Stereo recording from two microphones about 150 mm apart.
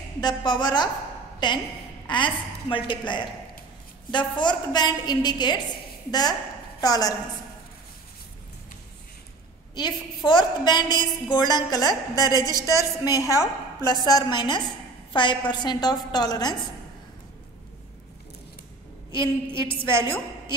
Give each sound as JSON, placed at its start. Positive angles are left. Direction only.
{"t": 0.2, "sound": "a woman's voice", "side_deg": 30}
{"t": 6.8, "sound": "a woman's voice", "side_deg": 25}
{"t": 9.8, "sound": "a woman's voice", "side_deg": 30}
{"t": 19.1, "sound": "a woman's voice", "side_deg": 30}